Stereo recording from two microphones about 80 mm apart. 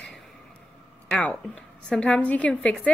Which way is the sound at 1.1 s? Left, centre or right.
Centre.